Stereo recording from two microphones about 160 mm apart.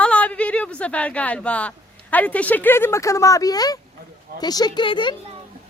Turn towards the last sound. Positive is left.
turn(degrees=30)  # may be behind; listen again after turning